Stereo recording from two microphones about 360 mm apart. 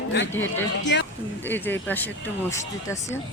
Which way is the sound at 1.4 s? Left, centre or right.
Centre.